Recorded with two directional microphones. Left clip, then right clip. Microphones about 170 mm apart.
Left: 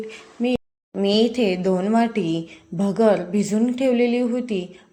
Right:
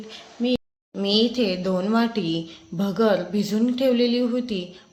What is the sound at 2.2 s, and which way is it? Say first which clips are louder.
Speech: left 2 dB; 40° left (ahead or behind).